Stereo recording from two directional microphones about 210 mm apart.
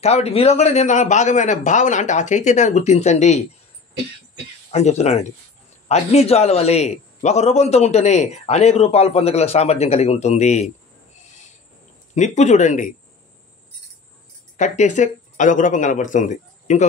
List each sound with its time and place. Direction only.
0.0 s a man's voice: 30° left (ahead or behind)
4.6 s a man's voice: 30° left (ahead or behind)
12.2 s a man's voice: 35° left (ahead or behind)
14.6 s a man's voice: 35° left (ahead or behind)